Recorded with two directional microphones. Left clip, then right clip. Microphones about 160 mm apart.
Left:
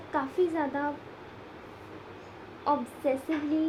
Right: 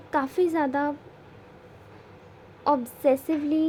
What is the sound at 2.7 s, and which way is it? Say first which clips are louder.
Speech: right 6 dB; 45° right (ahead or behind).